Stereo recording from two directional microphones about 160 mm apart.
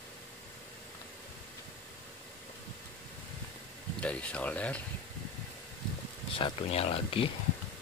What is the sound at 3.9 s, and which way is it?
Speech, 5° left (ahead or behind).